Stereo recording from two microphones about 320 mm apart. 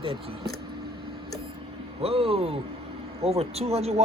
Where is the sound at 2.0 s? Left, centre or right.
Centre.